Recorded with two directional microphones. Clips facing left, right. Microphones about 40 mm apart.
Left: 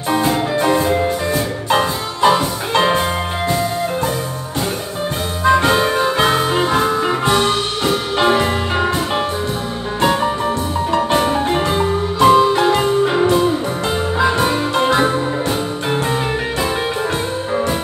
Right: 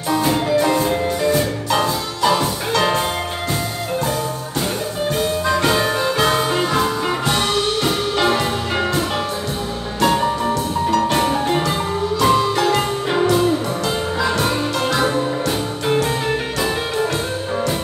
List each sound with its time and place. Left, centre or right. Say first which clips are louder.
0.2 s music: even; left
5.4 s music: left 7 dB; left
10.9 s music: left 2 dB; left
12.2 s marimba: left 6 dB; left
14.1 s music: left 5 dB; left